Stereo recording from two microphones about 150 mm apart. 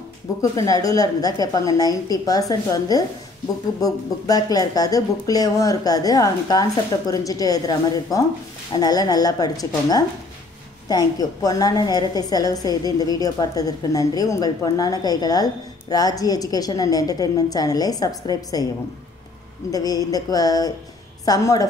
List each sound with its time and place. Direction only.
0.4 s a woman's voice: 25° left (ahead or behind)
19.7 s a woman's voice: 25° left (ahead or behind)